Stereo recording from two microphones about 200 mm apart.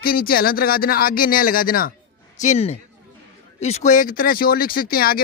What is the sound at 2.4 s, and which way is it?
A woman's voice, 35° left (ahead or behind).